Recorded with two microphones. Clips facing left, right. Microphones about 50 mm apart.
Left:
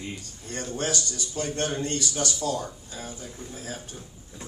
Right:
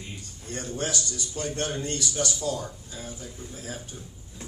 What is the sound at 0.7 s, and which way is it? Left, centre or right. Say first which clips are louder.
A man's voice: left 1 dB; left.